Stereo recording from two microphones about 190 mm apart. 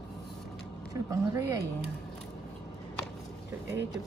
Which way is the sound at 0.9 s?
15° right (ahead or behind).